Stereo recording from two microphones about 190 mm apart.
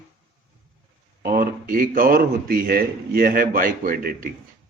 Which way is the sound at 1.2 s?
50° right (ahead or behind).